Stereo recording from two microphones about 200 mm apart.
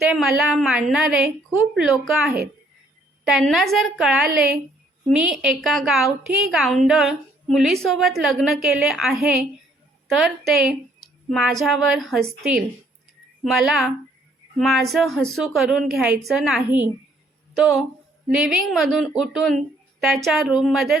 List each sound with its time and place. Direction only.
0.0 s a woman's voice: centre (ahead or behind)